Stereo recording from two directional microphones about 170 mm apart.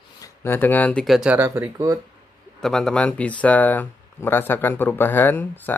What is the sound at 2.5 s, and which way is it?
Speech, 5° left (ahead or behind).